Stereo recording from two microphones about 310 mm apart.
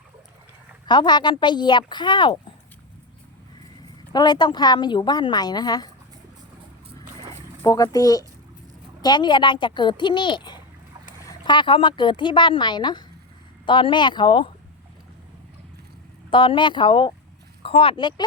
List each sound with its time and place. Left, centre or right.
0.9 s a woman's voice: centre
4.1 s a woman's voice: centre
7.6 s a woman's voice: centre
16.3 s a woman's voice: centre